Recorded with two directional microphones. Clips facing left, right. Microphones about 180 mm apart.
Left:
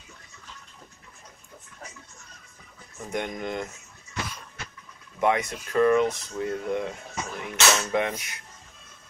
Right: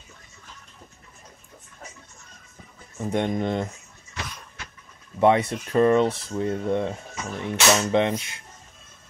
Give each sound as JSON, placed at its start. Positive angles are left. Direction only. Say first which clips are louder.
{"t": 3.0, "sound": "speech", "louder": "right 7 dB", "side_deg": -30}
{"t": 5.2, "sound": "speech", "louder": "right 5 dB", "side_deg": -30}